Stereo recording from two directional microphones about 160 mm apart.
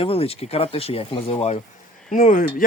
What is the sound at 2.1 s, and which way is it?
Speech, 55° left (ahead or behind).